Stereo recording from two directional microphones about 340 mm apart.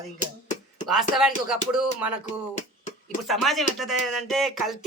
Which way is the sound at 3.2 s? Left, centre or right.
Centre.